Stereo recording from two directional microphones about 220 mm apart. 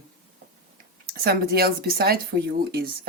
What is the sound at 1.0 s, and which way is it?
Speech, 45° right (ahead or behind).